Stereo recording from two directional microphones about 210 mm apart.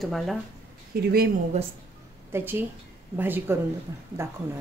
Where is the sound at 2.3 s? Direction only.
10° right (ahead or behind).